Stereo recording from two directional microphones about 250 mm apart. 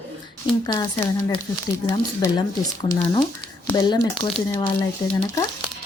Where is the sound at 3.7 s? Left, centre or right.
Centre.